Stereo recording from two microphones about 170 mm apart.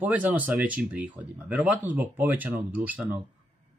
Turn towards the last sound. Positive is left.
turn(degrees=-10)  # may be behind; listen again after turning